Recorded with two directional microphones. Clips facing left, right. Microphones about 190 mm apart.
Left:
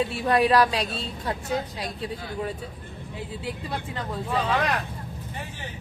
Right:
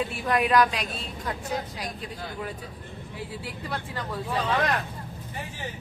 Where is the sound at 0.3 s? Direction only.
30° left (ahead or behind).